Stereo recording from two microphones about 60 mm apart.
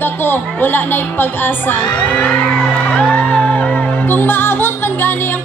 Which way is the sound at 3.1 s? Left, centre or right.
Left.